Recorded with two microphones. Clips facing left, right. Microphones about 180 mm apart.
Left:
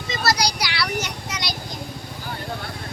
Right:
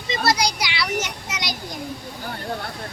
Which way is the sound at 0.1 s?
20° right (ahead or behind).